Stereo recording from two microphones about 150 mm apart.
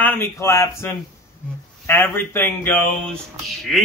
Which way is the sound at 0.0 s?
15° left (ahead or behind).